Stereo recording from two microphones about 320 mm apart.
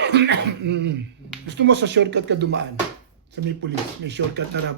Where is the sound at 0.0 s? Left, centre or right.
Right.